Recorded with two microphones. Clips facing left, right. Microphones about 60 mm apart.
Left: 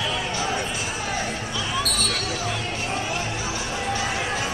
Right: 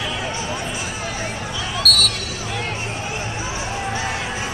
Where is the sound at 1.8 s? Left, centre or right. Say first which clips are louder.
Right 7 dB; right.